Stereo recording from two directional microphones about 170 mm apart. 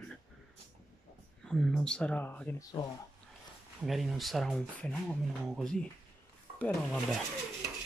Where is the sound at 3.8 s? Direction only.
Centre (ahead or behind).